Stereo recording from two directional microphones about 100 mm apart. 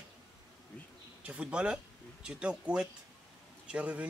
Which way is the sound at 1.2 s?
10° right (ahead or behind).